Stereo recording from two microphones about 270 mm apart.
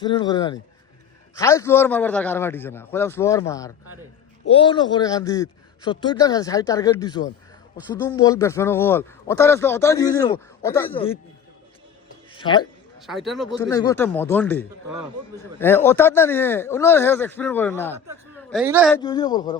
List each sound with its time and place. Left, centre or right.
0.0 s speech: centre
12.3 s speech: centre
13.0 s a man's voice: centre
13.6 s speech: centre
18.6 s speech: centre
19.0 s speech: centre